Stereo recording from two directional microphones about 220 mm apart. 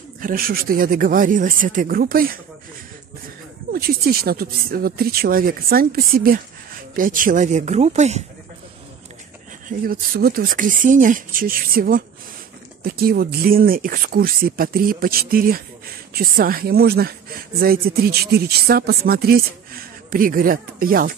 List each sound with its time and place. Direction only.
0.2 s speech: 40° right (ahead or behind)
3.7 s speech: 45° right (ahead or behind)
9.7 s speech: 40° right (ahead or behind)